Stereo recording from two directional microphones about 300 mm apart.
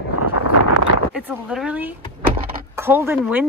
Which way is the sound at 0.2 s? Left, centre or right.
Left.